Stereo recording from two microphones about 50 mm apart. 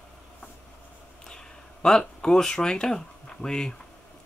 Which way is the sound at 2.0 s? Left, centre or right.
Centre.